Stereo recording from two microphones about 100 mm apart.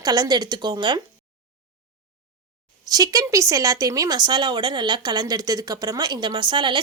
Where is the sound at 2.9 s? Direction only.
40° right (ahead or behind).